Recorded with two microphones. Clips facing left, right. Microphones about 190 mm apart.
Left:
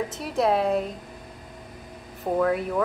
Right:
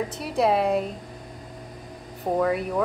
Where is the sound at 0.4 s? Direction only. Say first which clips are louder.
Right 1 dB; 5° right (ahead or behind).